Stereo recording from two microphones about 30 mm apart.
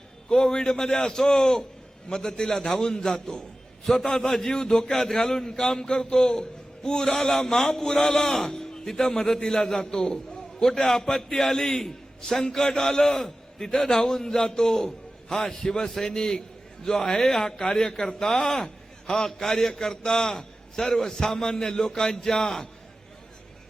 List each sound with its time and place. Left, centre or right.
0.3 s a man's voice: left
7.1 s a man's voice: centre
8.4 s music: left
9.1 s a man's voice: centre
20.7 s a man's voice: centre